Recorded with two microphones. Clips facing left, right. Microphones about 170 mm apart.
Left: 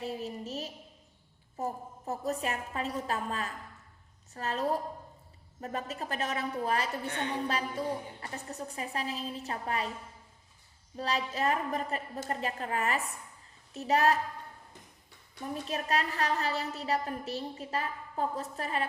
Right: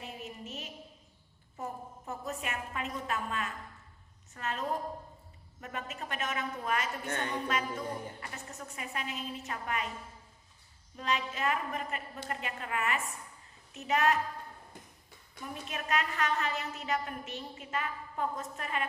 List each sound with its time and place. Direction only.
0.0 s a sound: 35° left (ahead or behind)
1.5 s a woman's voice: 35° left (ahead or behind)
10.9 s a woman's voice: 35° left (ahead or behind)
15.6 s a woman's voice: 35° left (ahead or behind)